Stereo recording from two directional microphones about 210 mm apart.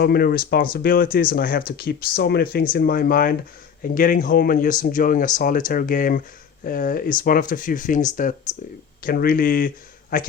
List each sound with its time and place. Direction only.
0.0 s speech: 45° left (ahead or behind)